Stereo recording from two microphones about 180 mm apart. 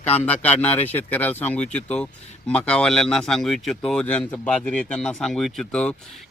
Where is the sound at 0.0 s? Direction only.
35° left (ahead or behind).